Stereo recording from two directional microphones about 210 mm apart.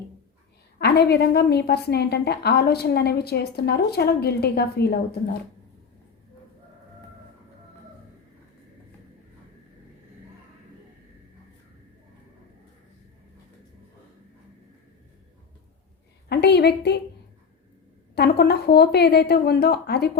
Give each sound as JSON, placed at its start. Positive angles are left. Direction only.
{"t": 0.8, "sound": "a woman's voice", "side_deg": 50}
{"t": 16.3, "sound": "a woman's voice", "side_deg": 50}
{"t": 18.1, "sound": "a woman's voice", "side_deg": 50}